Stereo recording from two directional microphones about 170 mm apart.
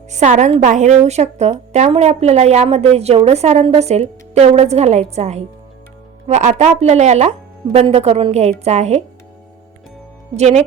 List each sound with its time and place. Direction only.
0.1 s a woman's voice: 45° right (ahead or behind)
10.3 s a woman's voice: 40° right (ahead or behind)